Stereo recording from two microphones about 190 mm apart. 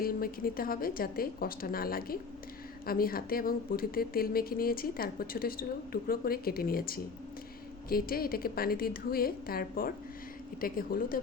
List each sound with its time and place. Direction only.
0.0 s a woman's voice: 50° left (ahead or behind)